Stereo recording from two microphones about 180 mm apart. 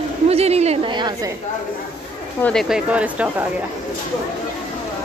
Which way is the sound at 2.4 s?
5° left (ahead or behind).